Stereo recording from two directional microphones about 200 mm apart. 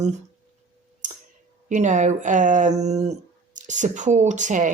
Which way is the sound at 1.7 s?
40° right (ahead or behind).